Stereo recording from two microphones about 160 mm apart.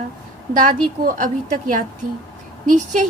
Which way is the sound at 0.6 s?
55° right (ahead or behind).